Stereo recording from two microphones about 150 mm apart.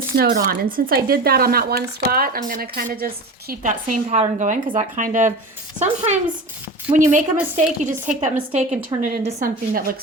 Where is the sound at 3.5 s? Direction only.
60° right (ahead or behind).